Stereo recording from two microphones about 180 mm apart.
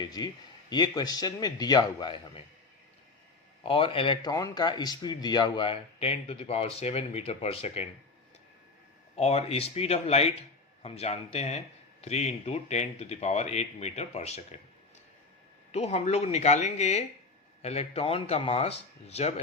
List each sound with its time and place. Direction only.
0.2 s a man's voice: 20° left (ahead or behind)
3.6 s speech: 30° left (ahead or behind)
9.1 s speech: 35° left (ahead or behind)
15.7 s speech: 35° left (ahead or behind)